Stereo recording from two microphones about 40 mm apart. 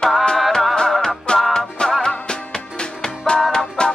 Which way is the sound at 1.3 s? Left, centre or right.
Left.